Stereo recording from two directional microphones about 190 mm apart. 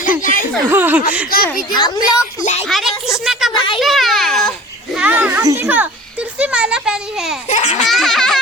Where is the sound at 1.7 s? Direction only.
20° left (ahead or behind).